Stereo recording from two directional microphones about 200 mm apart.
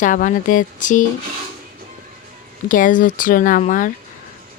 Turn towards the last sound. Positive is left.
turn(degrees=40)  # may be behind; listen again after turning